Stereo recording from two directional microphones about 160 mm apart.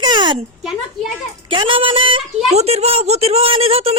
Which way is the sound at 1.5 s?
30° right (ahead or behind).